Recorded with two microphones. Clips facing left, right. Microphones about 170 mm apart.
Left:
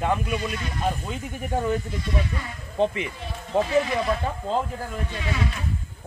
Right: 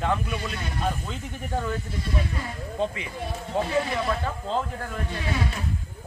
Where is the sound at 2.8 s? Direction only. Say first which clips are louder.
Left 5 dB; 20° left (ahead or behind).